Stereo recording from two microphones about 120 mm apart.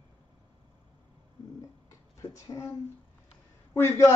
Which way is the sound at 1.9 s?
25° left (ahead or behind).